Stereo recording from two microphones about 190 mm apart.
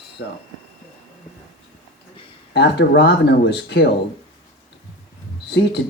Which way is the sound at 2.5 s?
60° left (ahead or behind).